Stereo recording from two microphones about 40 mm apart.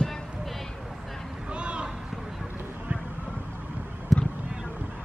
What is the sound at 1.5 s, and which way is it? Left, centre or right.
Vehicle, right.